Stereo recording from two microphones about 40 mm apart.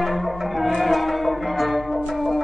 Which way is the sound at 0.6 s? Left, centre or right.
Centre.